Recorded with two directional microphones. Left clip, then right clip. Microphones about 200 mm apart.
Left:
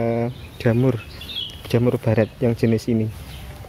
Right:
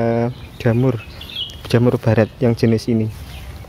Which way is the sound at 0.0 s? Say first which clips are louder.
Right 4 dB; 10° right (ahead or behind).